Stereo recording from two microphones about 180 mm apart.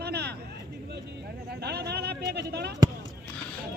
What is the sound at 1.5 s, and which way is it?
Speech, 65° right (ahead or behind).